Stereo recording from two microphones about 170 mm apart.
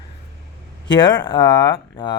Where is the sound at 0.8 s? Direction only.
25° left (ahead or behind).